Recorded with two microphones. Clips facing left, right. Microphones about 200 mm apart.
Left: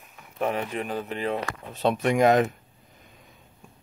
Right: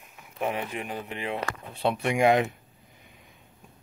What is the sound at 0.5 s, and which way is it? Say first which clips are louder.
Speech: left 3 dB; 40° left (ahead or behind).